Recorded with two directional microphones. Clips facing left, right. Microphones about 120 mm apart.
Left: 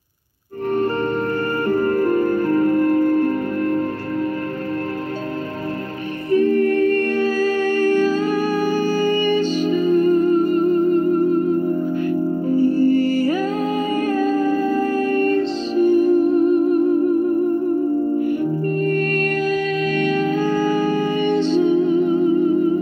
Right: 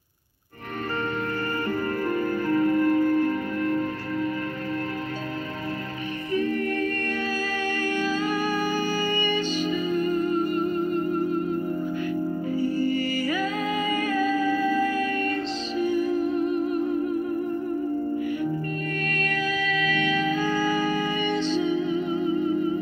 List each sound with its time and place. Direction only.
1.7 s music: 45° left (ahead or behind)
6.3 s music: 45° left (ahead or behind)
12.1 s music: 50° left (ahead or behind)
18.2 s music: 45° left (ahead or behind)